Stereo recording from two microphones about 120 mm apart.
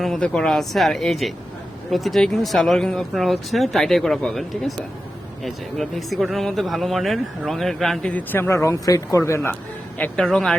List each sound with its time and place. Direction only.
0.0 s speech: 5° left (ahead or behind)
8.3 s speech: 20° left (ahead or behind)
10.0 s speech: 5° left (ahead or behind)